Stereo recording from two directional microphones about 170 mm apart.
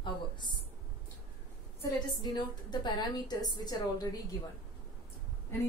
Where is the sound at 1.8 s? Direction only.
25° left (ahead or behind).